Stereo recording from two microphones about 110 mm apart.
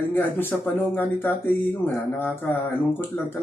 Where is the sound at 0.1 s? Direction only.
20° left (ahead or behind).